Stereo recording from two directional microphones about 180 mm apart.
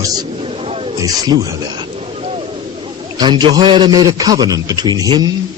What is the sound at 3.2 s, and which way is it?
Speech, 25° right (ahead or behind).